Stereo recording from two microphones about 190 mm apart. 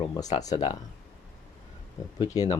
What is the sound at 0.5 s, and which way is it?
Speech, 20° left (ahead or behind).